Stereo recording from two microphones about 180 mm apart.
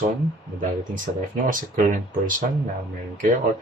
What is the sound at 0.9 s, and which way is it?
Speech, 45° right (ahead or behind).